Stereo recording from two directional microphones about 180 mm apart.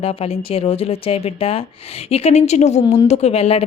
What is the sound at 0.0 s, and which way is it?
A woman's voice, 35° left (ahead or behind).